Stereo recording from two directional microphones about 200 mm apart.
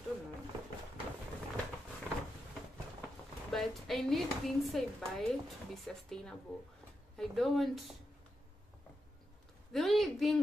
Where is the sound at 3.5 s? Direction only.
Centre (ahead or behind).